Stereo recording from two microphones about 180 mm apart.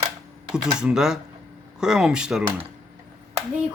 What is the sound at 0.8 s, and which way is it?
Speech, 5° right (ahead or behind).